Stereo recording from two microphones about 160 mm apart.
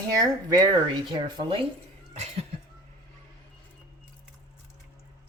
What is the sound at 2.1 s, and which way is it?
Speech, 45° right (ahead or behind).